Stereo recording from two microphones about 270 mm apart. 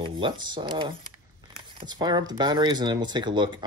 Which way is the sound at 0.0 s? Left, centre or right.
Centre.